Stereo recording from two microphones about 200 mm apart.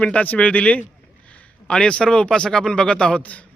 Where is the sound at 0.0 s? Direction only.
5° left (ahead or behind).